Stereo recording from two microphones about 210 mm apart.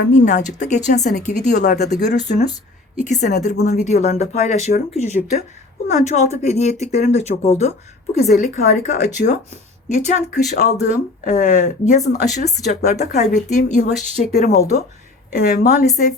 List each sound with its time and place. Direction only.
0.1 s speech: 35° left (ahead or behind)